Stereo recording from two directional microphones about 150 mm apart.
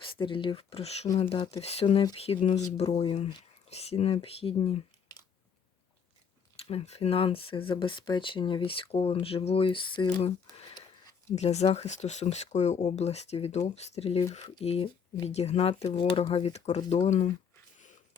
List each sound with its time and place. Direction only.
0.0 s speech: 35° left (ahead or behind)
3.1 s speech: 30° left (ahead or behind)
3.7 s speech: 45° left (ahead or behind)
6.6 s speech: 40° left (ahead or behind)
10.4 s a sound: 25° left (ahead or behind)
11.3 s speech: 45° left (ahead or behind)